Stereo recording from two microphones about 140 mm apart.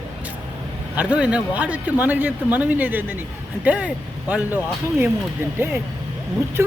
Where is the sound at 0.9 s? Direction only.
10° right (ahead or behind).